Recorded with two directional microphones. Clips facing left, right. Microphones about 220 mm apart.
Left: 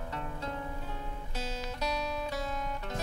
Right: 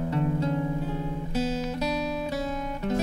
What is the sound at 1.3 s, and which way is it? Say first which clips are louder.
Music: right 11 dB; 5° right (ahead or behind).